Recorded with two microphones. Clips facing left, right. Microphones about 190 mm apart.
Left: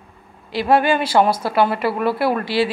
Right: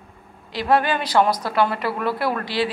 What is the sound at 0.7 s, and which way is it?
Speech, 10° left (ahead or behind).